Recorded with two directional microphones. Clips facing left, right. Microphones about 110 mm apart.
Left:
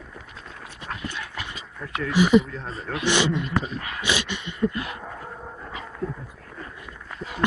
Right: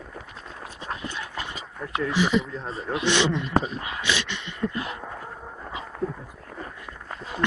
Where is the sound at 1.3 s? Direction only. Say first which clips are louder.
Right 2 dB; 30° right (ahead or behind).